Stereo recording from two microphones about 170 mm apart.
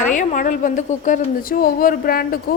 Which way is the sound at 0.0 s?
45° left (ahead or behind).